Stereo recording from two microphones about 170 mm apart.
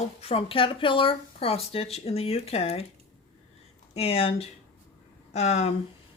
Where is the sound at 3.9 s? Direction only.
35° left (ahead or behind).